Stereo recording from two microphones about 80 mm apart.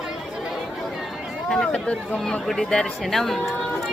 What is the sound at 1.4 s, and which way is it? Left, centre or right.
Speech, centre.